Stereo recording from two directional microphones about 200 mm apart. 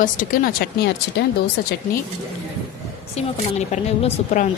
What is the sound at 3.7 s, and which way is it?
Speech, 35° left (ahead or behind).